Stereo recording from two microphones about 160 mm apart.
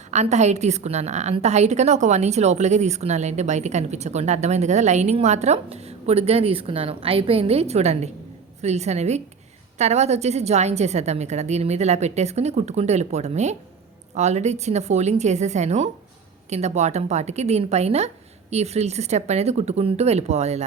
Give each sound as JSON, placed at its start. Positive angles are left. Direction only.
{"t": 0.1, "sound": "a woman's voice", "side_deg": -45}